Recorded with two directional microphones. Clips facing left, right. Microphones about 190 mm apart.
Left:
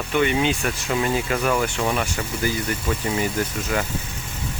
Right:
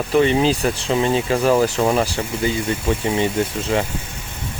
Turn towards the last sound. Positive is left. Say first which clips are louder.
# right 4 dB
turn(degrees=-25)  # may be behind; listen again after turning